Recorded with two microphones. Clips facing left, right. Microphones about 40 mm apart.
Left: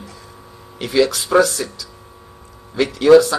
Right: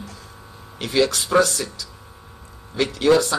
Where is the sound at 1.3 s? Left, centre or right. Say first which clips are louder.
Left 4 dB; centre.